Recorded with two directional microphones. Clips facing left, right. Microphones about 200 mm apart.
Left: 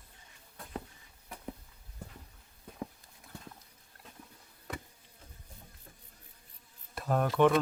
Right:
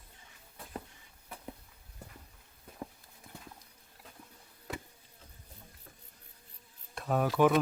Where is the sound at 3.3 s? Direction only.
20° right (ahead or behind).